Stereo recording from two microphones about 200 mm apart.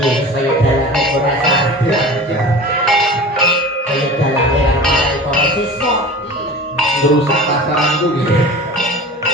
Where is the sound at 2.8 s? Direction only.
Centre (ahead or behind).